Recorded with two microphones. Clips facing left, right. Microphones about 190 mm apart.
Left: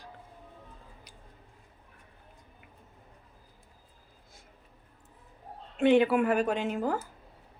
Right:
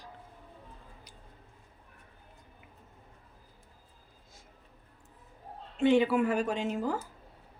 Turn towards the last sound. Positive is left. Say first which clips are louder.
# left 2 dB
turn(degrees=55)  # may be behind; listen again after turning